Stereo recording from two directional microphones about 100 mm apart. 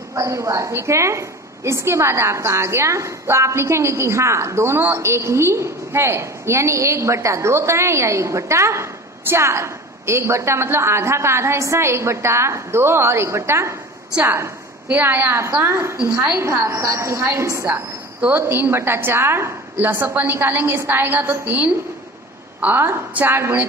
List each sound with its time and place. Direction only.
0.1 s a woman's voice: 30° right (ahead or behind)